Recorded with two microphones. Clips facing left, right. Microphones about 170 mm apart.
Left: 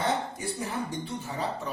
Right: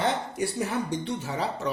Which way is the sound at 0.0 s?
75° right (ahead or behind).